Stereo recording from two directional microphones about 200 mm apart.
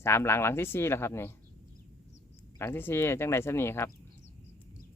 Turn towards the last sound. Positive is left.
turn(degrees=10)  # may be behind; listen again after turning